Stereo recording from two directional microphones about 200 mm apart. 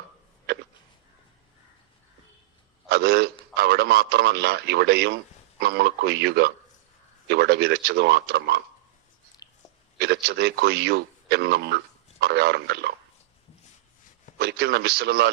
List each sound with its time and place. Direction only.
2.9 s a man's voice: 50° right (ahead or behind)
9.4 s a sound: 20° left (ahead or behind)
10.0 s a man's voice: 55° right (ahead or behind)
14.3 s a man's voice: 55° right (ahead or behind)